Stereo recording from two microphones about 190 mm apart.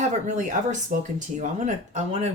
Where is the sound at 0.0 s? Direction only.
40° right (ahead or behind).